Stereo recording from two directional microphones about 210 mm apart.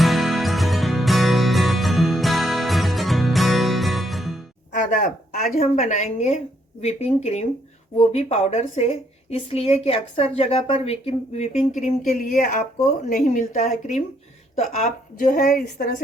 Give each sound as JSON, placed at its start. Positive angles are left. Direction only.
{"t": 0.0, "sound": "music", "side_deg": 0}
{"t": 4.7, "sound": "a sound", "side_deg": 40}
{"t": 6.8, "sound": "a woman's voice", "side_deg": 30}